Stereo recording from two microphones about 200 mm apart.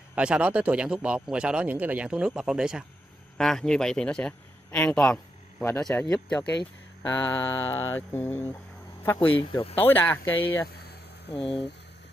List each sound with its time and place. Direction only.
0.1 s a man's voice: 5° right (ahead or behind)
7.1 s mantra: 10° left (ahead or behind)
9.0 s speech: 10° left (ahead or behind)
9.3 s speech: 25° left (ahead or behind)
9.8 s mantra: 10° left (ahead or behind)
10.7 s a sound: 50° left (ahead or behind)
11.3 s speech: 25° left (ahead or behind)